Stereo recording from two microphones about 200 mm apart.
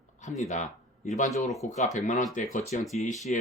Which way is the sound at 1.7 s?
35° left (ahead or behind).